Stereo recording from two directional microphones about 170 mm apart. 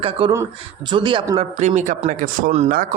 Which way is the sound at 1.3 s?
40° right (ahead or behind).